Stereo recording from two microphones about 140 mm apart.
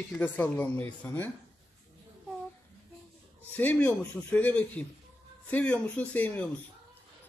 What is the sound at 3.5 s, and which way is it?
Speech, 10° left (ahead or behind).